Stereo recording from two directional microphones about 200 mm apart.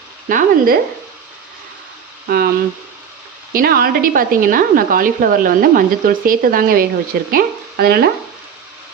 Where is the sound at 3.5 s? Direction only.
45° right (ahead or behind).